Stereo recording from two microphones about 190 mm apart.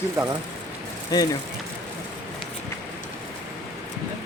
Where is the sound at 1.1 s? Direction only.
20° left (ahead or behind).